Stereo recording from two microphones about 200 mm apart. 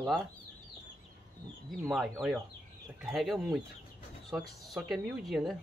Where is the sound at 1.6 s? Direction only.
Centre (ahead or behind).